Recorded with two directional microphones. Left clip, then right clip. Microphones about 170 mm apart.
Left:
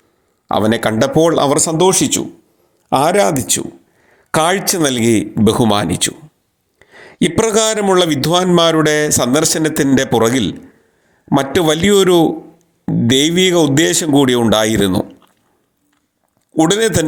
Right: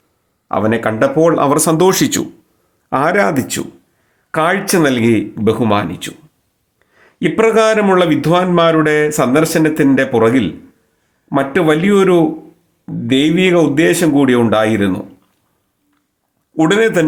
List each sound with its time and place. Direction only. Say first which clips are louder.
0.4 s speech: even; 35° left (ahead or behind)
1.5 s speech: right 2 dB; 15° left (ahead or behind)
1.8 s speech: right 1 dB; centre (ahead or behind)
2.9 s a man's voice: left 1 dB; 15° left (ahead or behind); by 15.0 s 45° left (ahead or behind)
16.6 s a man's voice: right 1 dB; 30° left (ahead or behind)